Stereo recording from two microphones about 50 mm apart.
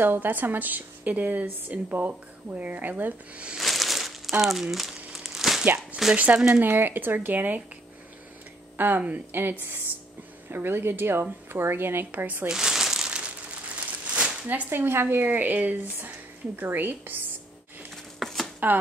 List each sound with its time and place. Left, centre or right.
0.0 s a woman's voice: right
3.5 s crumpling: centre
6.1 s speech: right
6.5 s a woman's voice: right
8.7 s speech: right
12.4 s crumpling: centre
13.7 s a sound: right
14.7 s a woman's voice: right
17.9 s a sound: centre